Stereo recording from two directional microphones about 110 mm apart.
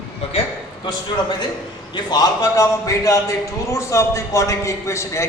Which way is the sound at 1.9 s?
35° left (ahead or behind).